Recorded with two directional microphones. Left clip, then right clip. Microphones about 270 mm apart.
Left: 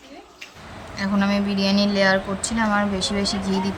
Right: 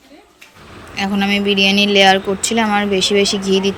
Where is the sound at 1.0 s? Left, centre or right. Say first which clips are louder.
Right 6 dB; centre.